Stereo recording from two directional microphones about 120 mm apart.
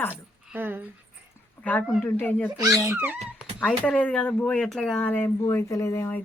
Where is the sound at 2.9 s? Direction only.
15° right (ahead or behind).